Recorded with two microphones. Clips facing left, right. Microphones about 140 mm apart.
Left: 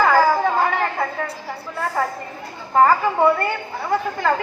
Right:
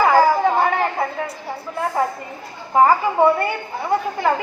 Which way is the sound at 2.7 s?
15° right (ahead or behind).